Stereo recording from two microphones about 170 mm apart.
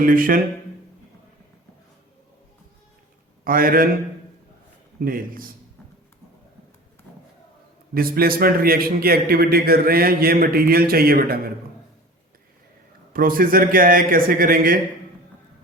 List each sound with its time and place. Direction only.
0.0 s a man's voice: 55° right (ahead or behind)
3.4 s a man's voice: 55° right (ahead or behind)
4.9 s a man's voice: 55° right (ahead or behind)
7.9 s a man's voice: 60° right (ahead or behind)
13.1 s a man's voice: 55° right (ahead or behind)